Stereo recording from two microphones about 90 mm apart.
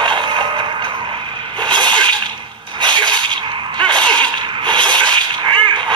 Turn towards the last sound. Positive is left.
turn(degrees=-60)  # may be behind; listen again after turning